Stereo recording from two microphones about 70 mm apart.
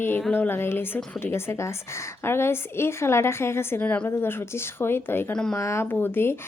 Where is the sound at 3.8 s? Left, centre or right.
Left.